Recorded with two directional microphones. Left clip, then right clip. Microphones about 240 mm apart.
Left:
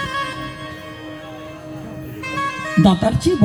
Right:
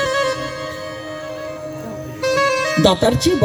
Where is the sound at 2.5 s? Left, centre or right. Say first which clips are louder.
Right 4 dB; right.